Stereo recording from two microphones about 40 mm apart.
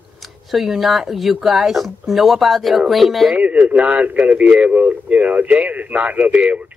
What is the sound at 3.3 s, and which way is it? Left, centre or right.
Speech, right.